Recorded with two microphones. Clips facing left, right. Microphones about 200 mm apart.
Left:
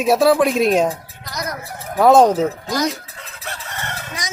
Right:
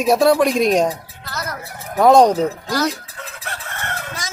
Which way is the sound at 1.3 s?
15° left (ahead or behind).